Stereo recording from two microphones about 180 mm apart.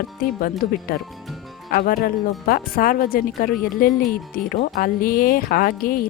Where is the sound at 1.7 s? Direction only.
55° left (ahead or behind).